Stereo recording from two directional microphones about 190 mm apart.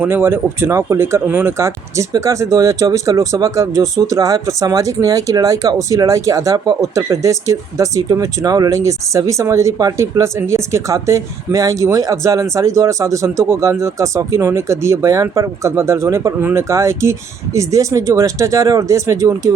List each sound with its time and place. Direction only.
0.0 s speech: 10° right (ahead or behind)